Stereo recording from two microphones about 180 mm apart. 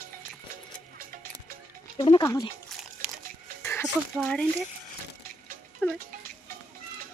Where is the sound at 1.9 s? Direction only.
30° left (ahead or behind).